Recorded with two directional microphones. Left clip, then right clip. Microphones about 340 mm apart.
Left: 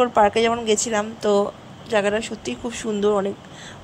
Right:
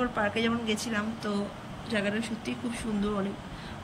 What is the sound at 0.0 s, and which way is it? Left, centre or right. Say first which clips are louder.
A woman's voice: left 12 dB; centre.